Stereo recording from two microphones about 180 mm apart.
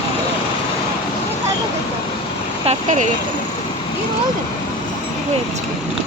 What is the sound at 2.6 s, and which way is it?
Speech, 40° right (ahead or behind).